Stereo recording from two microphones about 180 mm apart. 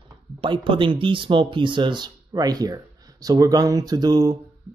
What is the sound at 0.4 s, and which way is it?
Speech, 30° right (ahead or behind).